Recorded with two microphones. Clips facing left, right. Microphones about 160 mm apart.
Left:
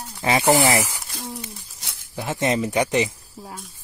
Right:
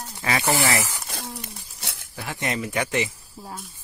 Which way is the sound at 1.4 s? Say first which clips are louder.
Even; 70° right (ahead or behind).